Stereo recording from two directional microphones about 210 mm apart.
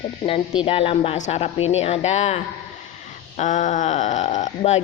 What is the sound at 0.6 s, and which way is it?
A woman's voice, 25° left (ahead or behind).